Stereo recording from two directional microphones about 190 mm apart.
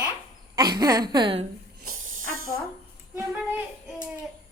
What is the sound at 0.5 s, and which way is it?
Speech, 20° right (ahead or behind).